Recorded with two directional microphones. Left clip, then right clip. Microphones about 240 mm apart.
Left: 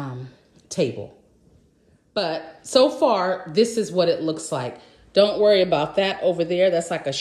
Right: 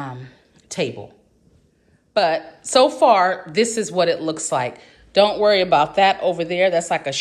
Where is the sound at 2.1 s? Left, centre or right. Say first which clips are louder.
Right 7 dB; centre.